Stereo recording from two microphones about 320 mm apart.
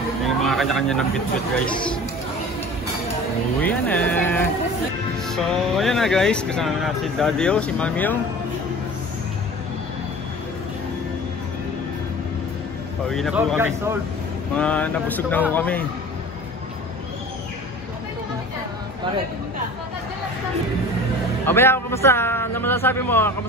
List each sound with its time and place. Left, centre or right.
0.2 s a sound: centre
3.6 s speech: centre
13.1 s speech: centre
21.5 s a man's voice: centre